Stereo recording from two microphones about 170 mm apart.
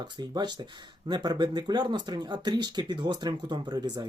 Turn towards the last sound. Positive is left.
turn(degrees=-25)  # may be behind; listen again after turning